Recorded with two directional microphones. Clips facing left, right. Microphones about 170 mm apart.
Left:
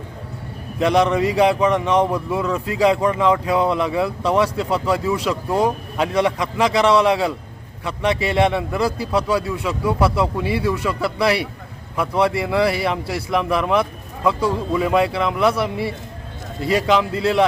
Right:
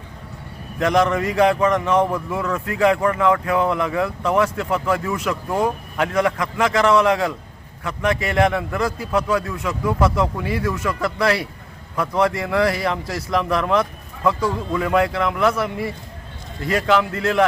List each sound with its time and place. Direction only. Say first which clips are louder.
0.8 s a man's voice: left 2 dB; 15° left (ahead or behind)
10.3 s speech: left 3 dB; 25° left (ahead or behind)
11.0 s a man's voice: even; 15° left (ahead or behind)
16.7 s a man's voice: left 1 dB; 15° left (ahead or behind)